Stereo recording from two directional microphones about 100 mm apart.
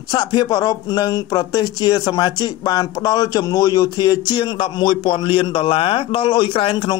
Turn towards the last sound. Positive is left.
turn(degrees=50)  # may be behind; listen again after turning